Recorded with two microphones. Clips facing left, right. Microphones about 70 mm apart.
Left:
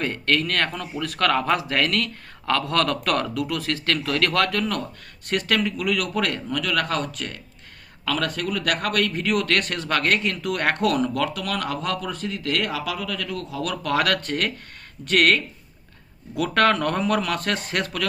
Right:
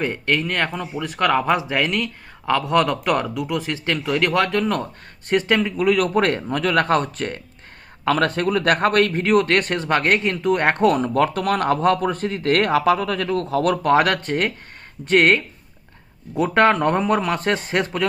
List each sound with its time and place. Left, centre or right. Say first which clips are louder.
0.0 s a man's voice: right 2 dB; centre